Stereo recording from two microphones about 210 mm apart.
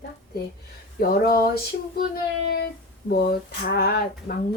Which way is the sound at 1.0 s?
45° left (ahead or behind).